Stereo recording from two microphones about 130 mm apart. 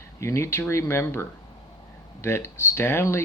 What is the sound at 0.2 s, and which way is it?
Speech, 20° left (ahead or behind).